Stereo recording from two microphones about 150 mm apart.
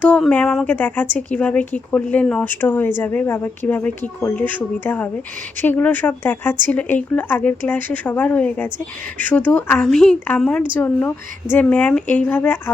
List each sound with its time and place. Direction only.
0.0 s speech: 10° left (ahead or behind)